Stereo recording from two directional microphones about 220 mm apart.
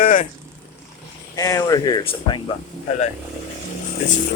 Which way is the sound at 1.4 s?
15° left (ahead or behind).